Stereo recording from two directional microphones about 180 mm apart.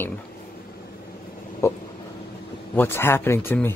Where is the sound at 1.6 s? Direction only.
15° left (ahead or behind).